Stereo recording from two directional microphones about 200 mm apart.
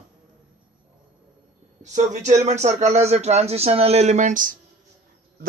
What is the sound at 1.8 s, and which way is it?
Speech, 35° right (ahead or behind).